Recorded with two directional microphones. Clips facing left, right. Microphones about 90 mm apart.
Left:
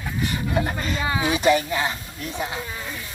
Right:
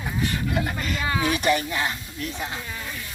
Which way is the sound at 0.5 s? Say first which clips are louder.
Left 2 dB; 30° left (ahead or behind).